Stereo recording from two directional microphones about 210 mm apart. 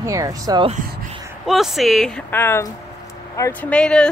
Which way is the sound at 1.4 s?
Centre (ahead or behind).